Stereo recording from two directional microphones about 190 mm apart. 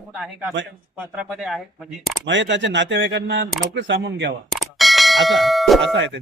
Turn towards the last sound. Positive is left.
turn(degrees=-70)  # may be behind; listen again after turning